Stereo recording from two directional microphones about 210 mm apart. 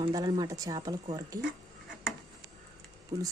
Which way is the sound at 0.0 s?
20° right (ahead or behind).